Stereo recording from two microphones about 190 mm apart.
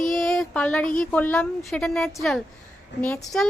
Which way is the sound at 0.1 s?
Centre (ahead or behind).